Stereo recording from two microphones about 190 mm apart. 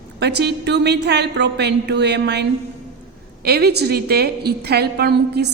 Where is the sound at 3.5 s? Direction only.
60° right (ahead or behind).